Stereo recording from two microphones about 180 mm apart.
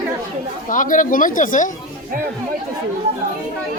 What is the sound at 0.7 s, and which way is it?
Speech, 45° left (ahead or behind).